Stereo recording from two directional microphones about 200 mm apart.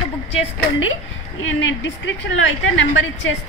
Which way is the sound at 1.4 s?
65° left (ahead or behind).